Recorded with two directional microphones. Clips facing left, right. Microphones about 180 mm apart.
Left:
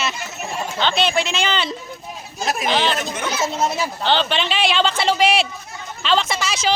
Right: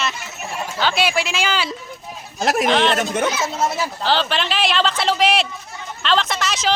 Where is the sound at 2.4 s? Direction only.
75° right (ahead or behind).